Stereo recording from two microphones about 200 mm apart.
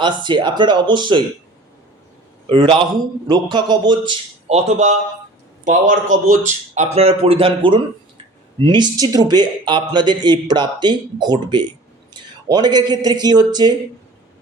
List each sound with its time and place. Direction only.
0.0 s speech: 25° right (ahead or behind)
2.5 s a man's voice: 25° right (ahead or behind); by 6.3 s 40° right (ahead or behind)
6.7 s speech: 30° right (ahead or behind)